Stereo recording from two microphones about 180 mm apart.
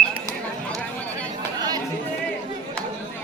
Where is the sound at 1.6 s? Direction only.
20° right (ahead or behind).